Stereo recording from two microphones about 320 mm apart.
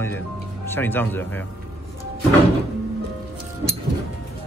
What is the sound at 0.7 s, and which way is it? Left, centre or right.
Speech, centre.